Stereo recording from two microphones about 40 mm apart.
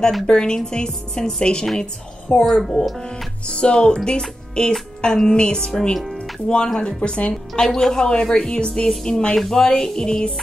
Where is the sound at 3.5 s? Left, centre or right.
Left.